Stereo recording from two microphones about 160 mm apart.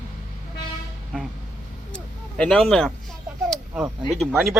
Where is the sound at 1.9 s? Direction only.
5° left (ahead or behind).